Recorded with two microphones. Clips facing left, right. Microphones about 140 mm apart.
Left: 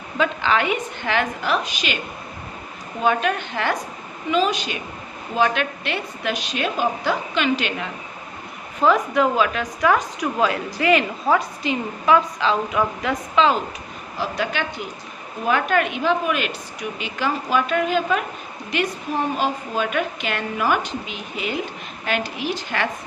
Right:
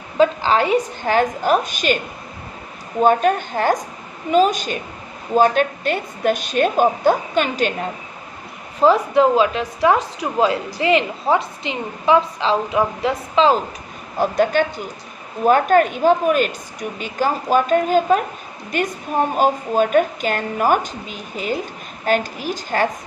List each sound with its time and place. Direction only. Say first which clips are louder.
0.2 s a woman's voice: right 5 dB; 35° right (ahead or behind)
3.0 s a woman's voice: right 6 dB; 45° right (ahead or behind)
8.8 s a woman's voice: right 4 dB; 30° right (ahead or behind)
14.2 s a woman's voice: right 8 dB; 50° right (ahead or behind)